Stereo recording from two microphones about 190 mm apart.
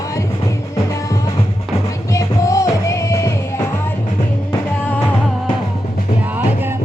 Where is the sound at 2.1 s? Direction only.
15° left (ahead or behind).